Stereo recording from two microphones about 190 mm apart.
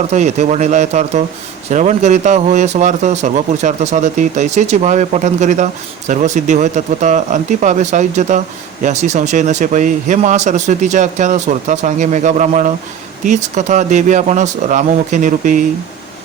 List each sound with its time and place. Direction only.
0.1 s speech: 35° right (ahead or behind)